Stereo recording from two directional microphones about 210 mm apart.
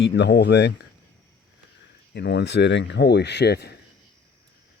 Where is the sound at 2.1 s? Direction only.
55° left (ahead or behind).